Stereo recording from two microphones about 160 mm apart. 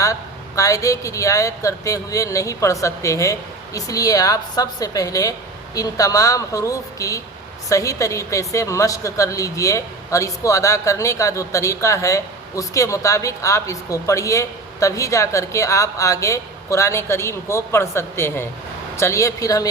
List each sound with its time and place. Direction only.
0.0 s a woman's voice: 20° left (ahead or behind)